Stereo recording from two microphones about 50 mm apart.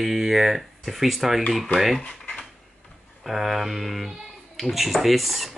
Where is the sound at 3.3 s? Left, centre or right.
Centre.